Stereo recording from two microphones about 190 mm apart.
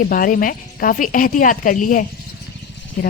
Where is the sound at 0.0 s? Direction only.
50° left (ahead or behind).